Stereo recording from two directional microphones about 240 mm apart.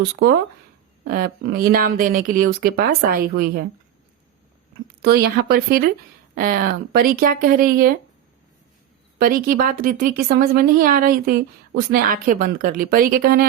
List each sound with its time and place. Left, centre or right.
1.0 s speech: right
5.0 s speech: right
9.1 s speech: right